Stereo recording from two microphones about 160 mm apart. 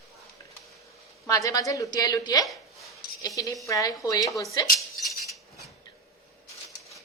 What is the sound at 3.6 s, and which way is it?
Speech, 20° left (ahead or behind).